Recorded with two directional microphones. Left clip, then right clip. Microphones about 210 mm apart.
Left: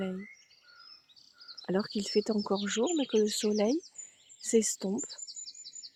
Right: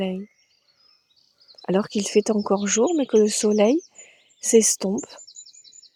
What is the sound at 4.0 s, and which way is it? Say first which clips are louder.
Bird vocalization: right 8 dB; 30° right (ahead or behind).